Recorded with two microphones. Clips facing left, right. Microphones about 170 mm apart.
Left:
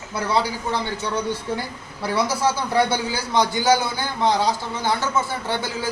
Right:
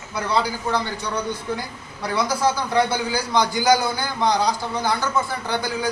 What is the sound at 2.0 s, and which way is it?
A man's voice, 5° left (ahead or behind).